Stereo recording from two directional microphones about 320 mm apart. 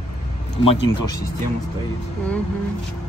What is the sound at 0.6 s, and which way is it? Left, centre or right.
Speech, centre.